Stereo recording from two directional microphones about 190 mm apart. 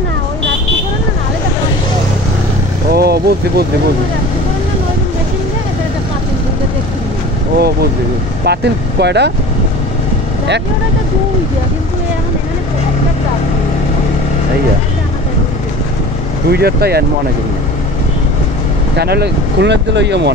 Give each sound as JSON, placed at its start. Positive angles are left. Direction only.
{"t": 2.9, "sound": "speech", "side_deg": -55}
{"t": 7.5, "sound": "speech", "side_deg": -55}
{"t": 16.4, "sound": "speech", "side_deg": -55}
{"t": 18.9, "sound": "speech", "side_deg": -60}